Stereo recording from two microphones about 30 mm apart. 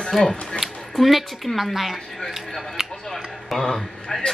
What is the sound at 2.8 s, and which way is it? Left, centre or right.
Music, centre.